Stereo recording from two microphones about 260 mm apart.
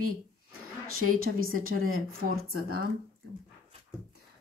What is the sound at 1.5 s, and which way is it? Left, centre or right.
Speech, right.